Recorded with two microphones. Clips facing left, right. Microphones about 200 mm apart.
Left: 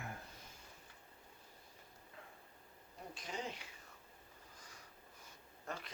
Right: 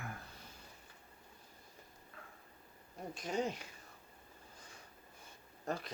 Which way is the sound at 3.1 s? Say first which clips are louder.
Right 8 dB; 45° right (ahead or behind).